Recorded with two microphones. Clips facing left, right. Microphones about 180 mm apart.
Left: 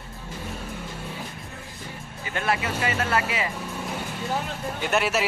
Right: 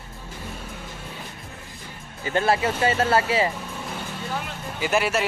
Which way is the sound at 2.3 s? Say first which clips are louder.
Right 5 dB; 30° right (ahead or behind).